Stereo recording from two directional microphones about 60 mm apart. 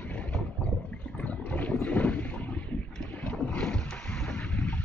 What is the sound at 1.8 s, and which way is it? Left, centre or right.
Boat, left.